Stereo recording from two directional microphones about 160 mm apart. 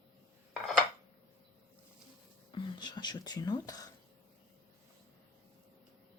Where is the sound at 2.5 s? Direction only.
25° left (ahead or behind).